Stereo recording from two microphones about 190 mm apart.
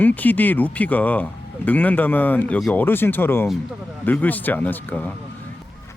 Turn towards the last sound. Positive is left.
turn(degrees=10)  # may be behind; listen again after turning